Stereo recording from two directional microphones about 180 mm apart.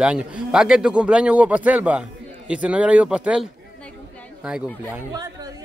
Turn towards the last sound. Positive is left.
turn(degrees=-20)  # may be behind; listen again after turning